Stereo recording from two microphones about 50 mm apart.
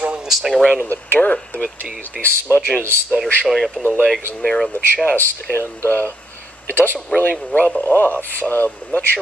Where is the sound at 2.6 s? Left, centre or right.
Left.